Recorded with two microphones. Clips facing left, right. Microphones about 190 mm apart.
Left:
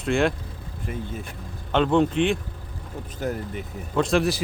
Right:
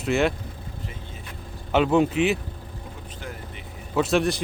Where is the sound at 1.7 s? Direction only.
5° right (ahead or behind).